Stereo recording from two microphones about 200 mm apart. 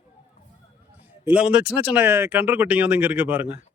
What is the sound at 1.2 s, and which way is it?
Speech, 5° right (ahead or behind).